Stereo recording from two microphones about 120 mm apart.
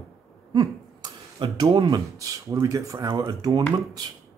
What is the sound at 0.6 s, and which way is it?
Speech, 35° right (ahead or behind).